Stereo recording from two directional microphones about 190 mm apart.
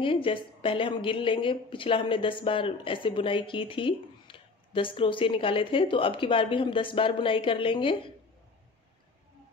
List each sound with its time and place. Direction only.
0.0 s speech: 25° left (ahead or behind)